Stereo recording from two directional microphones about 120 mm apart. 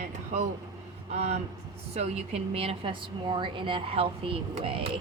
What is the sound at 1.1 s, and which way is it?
A woman's voice, 65° right (ahead or behind).